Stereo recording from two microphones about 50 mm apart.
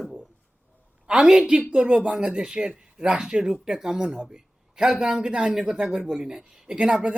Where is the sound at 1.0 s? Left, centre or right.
Centre.